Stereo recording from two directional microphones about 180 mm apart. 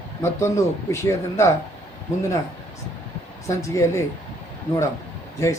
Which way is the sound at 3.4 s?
15° left (ahead or behind).